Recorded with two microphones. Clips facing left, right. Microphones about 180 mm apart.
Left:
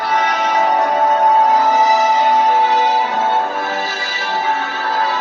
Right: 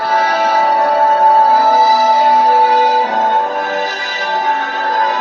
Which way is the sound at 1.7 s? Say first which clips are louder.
Right 2 dB; 10° right (ahead or behind).